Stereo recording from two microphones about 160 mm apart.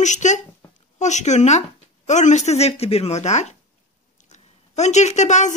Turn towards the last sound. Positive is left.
turn(degrees=50)  # may be behind; listen again after turning